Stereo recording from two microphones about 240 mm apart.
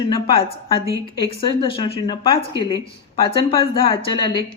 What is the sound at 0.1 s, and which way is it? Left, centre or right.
Speech, left.